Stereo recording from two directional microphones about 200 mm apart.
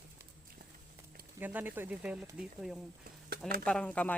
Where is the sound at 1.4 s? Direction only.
10° right (ahead or behind).